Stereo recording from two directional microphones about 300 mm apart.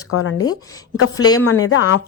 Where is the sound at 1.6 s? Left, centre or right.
Left.